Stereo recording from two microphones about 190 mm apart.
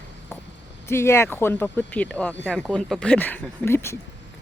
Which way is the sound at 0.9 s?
15° left (ahead or behind).